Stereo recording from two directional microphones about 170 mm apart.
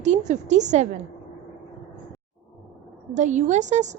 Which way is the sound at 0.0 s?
45° right (ahead or behind).